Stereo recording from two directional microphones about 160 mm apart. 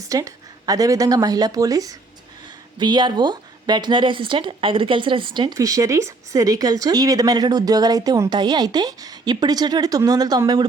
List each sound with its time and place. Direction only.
0.0 s a woman's voice: 20° right (ahead or behind)